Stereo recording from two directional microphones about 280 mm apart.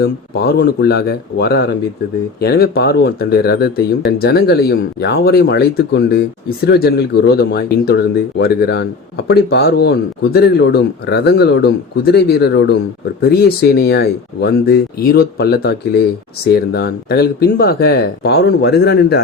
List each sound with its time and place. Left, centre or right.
0.0 s speech: left